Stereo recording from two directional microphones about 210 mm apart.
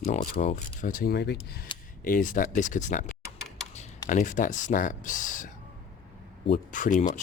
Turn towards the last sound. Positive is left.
turn(degrees=35)  # may be behind; listen again after turning